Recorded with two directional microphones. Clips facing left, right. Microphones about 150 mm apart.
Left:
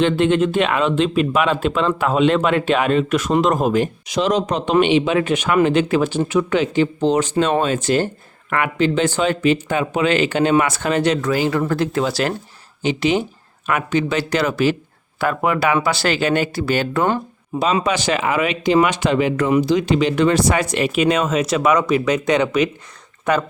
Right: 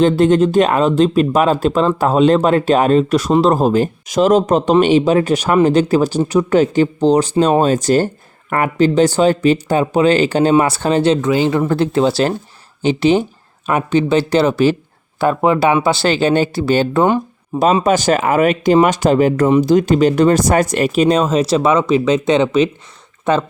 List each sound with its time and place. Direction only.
0.0 s speech: 40° right (ahead or behind)
17.8 s speech: 45° right (ahead or behind); by 23.4 s 25° right (ahead or behind)